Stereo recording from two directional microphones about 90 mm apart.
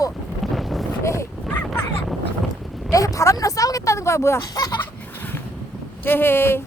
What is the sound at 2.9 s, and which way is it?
Speech, 35° left (ahead or behind).